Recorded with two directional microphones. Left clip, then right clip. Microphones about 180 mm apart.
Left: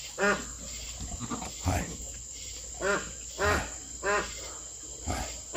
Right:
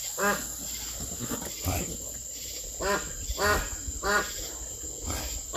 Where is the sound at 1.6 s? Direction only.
35° left (ahead or behind).